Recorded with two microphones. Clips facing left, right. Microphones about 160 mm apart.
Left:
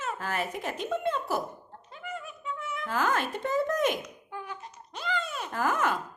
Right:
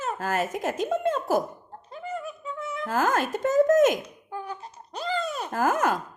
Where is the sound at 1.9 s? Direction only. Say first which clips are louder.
Right 6 dB; 35° right (ahead or behind).